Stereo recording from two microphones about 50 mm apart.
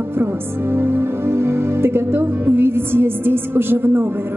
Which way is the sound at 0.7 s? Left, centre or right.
Right.